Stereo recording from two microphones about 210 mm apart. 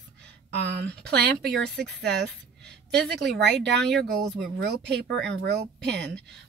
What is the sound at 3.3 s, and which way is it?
Speech, 55° right (ahead or behind).